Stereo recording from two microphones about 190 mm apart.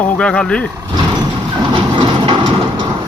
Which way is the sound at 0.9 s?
20° right (ahead or behind).